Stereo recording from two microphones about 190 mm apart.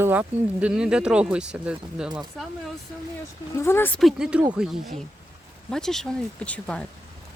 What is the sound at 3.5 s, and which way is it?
Speech, 15° left (ahead or behind).